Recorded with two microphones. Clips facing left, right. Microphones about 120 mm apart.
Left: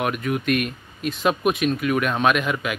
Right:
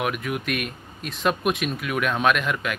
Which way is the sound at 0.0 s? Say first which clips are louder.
Left 3 dB; centre (ahead or behind).